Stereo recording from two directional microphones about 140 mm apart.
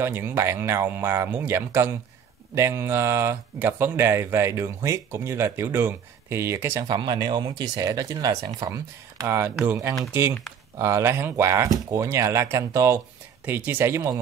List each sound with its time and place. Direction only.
0.0 s speech: 15° right (ahead or behind)
6.9 s speech: 30° right (ahead or behind)